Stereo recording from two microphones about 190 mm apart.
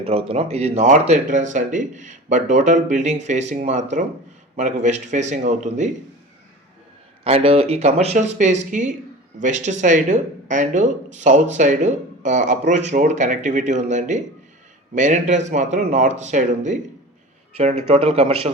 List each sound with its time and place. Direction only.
0.0 s speech: 30° right (ahead or behind)
7.3 s speech: 30° right (ahead or behind)